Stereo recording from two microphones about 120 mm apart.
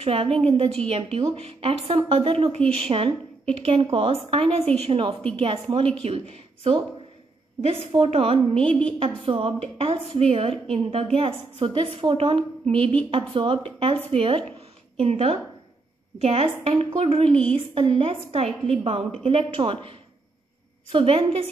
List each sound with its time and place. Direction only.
0.0 s a woman's voice: 55° right (ahead or behind)
7.9 s a woman's voice: 50° right (ahead or behind)
8.6 s a woman's voice: 10° left (ahead or behind)
9.0 s a woman's voice: 50° right (ahead or behind)
17.3 s a woman's voice: 10° left (ahead or behind)
17.7 s a woman's voice: 50° right (ahead or behind)